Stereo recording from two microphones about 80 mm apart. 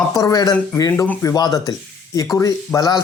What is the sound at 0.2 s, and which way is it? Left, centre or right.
Speech, left.